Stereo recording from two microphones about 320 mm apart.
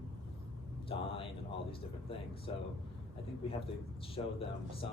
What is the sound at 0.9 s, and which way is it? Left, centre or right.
Speech, centre.